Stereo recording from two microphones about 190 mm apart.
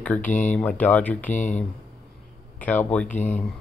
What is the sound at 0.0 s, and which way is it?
Speech, 10° left (ahead or behind).